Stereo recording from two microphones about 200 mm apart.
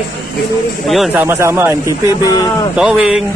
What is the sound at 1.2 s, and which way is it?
Speech, 10° right (ahead or behind).